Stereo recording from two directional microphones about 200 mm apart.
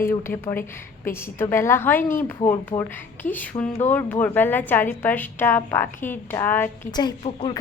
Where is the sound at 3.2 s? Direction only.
10° left (ahead or behind).